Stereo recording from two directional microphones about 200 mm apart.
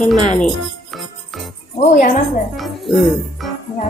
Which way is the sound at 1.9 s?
40° left (ahead or behind).